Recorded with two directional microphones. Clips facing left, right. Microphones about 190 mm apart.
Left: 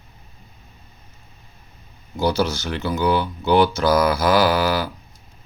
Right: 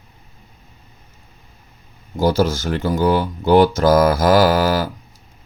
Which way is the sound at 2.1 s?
45° right (ahead or behind).